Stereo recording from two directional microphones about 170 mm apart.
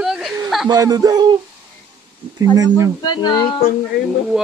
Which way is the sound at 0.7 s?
20° right (ahead or behind).